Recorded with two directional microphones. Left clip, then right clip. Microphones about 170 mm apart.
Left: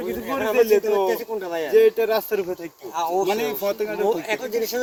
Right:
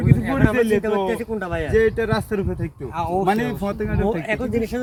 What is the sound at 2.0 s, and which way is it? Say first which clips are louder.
Speech: left 1 dB; 20° left (ahead or behind).